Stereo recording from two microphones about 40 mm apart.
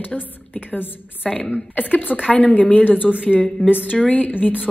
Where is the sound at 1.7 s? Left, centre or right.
Left.